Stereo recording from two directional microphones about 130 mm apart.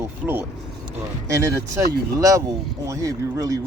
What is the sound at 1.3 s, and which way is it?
Speech, 25° right (ahead or behind).